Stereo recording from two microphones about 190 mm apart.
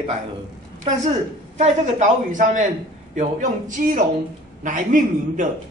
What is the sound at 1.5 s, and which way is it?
A man's voice, 40° right (ahead or behind).